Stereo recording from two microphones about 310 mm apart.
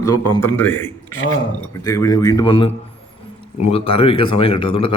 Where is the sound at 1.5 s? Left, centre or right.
Centre.